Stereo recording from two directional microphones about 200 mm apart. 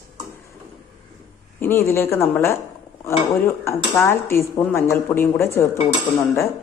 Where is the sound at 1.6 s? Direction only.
10° left (ahead or behind).